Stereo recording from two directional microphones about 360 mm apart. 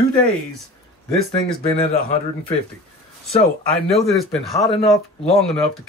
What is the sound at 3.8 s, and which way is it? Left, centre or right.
Speech, centre.